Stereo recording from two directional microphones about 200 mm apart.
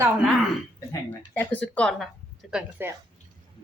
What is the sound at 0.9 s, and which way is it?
Speech, 10° left (ahead or behind).